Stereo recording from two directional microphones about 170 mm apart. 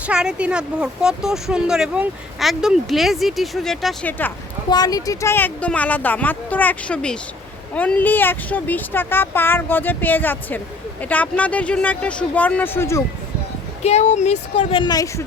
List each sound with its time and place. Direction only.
0.1 s speech: 5° right (ahead or behind)
4.7 s speech: 25° left (ahead or behind)
13.8 s speech: 40° left (ahead or behind)
14.8 s a woman's voice: 25° left (ahead or behind)